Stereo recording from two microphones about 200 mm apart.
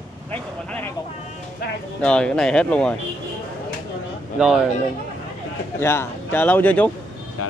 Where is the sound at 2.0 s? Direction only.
5° left (ahead or behind).